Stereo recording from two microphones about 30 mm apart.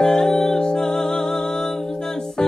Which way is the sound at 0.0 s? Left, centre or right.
Left.